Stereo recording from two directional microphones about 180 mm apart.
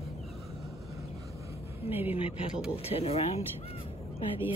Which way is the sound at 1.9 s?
10° right (ahead or behind).